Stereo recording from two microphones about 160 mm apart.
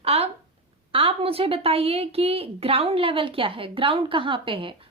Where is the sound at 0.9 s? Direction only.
35° right (ahead or behind).